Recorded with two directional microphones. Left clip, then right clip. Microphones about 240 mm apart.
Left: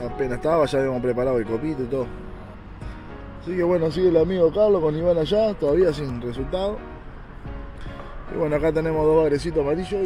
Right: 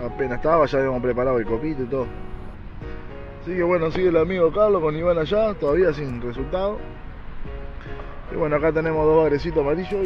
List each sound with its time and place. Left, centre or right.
0.0 s speech: centre
3.4 s speech: left
4.5 s speech: centre
5.7 s speech: centre
8.4 s speech: centre